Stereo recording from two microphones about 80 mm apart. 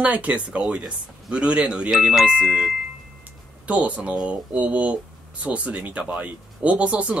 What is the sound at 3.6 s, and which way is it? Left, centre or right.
Speech, centre.